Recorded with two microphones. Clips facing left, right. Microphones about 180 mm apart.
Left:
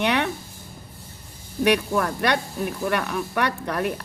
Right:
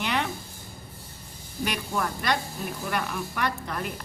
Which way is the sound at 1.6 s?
65° left (ahead or behind).